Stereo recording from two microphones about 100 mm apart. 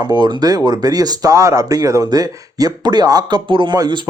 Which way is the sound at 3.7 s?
45° right (ahead or behind).